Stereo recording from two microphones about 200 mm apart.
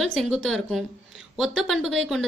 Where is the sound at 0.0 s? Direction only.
5° left (ahead or behind).